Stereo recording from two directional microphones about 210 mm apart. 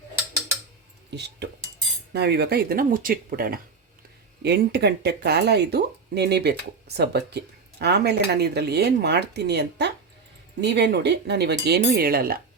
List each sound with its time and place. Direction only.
1.1 s speech: 55° right (ahead or behind)